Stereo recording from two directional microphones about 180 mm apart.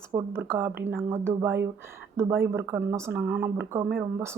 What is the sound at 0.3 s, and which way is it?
A woman's voice, 10° right (ahead or behind).